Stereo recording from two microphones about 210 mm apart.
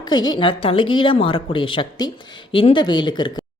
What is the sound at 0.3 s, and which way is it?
A woman's voice, 25° left (ahead or behind).